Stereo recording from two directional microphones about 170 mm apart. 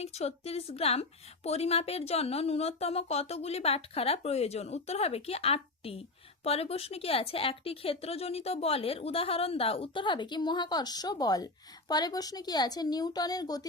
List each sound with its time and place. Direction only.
0.0 s speech: 40° left (ahead or behind); by 13.7 s 20° left (ahead or behind)